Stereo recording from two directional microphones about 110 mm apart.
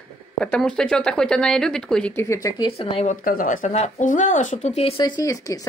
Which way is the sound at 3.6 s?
90° left.